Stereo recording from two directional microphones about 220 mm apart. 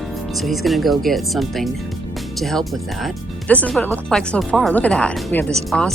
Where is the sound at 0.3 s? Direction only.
Centre (ahead or behind).